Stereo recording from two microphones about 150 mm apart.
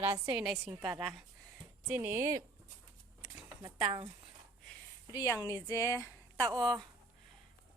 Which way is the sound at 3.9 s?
35° right (ahead or behind).